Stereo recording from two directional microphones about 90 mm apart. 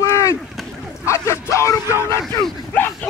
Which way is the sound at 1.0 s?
35° left (ahead or behind).